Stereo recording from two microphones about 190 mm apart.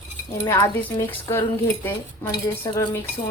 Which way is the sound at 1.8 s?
15° left (ahead or behind).